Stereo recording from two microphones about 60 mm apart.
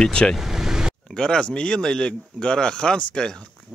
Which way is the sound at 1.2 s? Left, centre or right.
Centre.